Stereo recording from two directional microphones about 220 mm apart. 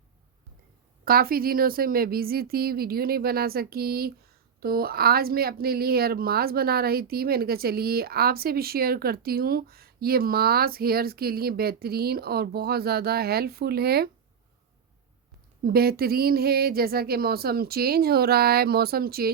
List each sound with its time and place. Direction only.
1.0 s a woman's voice: 40° right (ahead or behind)
15.6 s a woman's voice: 45° right (ahead or behind)